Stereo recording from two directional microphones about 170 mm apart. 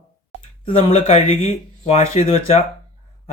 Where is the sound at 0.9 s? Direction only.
35° left (ahead or behind).